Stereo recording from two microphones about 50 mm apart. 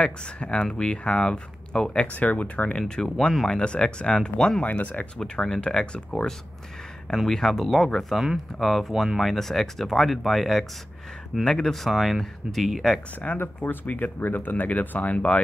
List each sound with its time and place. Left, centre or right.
0.0 s speech: left
2.1 s speech: left
2.8 s speech: centre
4.6 s speech: left
5.3 s speech: centre
7.2 s speech: centre
11.4 s speech: centre
13.3 s speech: left